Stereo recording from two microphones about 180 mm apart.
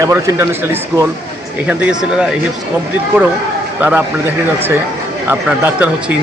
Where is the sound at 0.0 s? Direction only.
15° right (ahead or behind).